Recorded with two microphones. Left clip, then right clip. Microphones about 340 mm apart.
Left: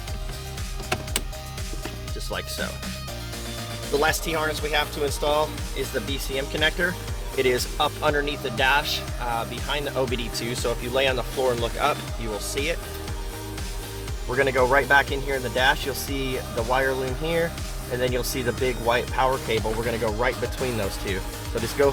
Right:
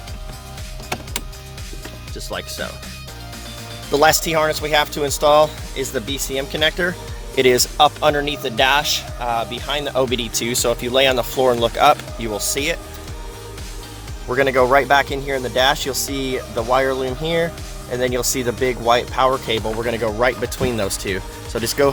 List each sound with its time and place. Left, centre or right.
2.3 s speech: centre
3.9 s speech: right
14.3 s speech: right